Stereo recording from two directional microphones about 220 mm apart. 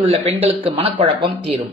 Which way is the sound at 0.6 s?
25° right (ahead or behind).